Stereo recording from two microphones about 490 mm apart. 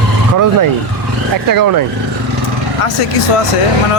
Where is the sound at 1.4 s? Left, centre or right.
Right.